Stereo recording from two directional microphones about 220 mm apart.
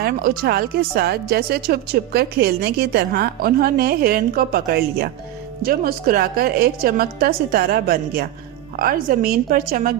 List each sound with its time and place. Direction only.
0.0 s a woman's voice: 45° right (ahead or behind)